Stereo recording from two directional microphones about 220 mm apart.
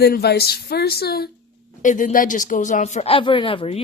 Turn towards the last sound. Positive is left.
turn(degrees=25)  # may be behind; listen again after turning